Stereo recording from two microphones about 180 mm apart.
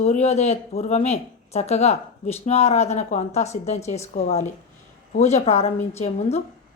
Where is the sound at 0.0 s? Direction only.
40° left (ahead or behind).